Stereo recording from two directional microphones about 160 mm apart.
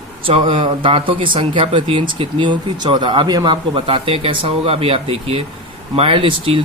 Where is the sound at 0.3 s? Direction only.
35° right (ahead or behind).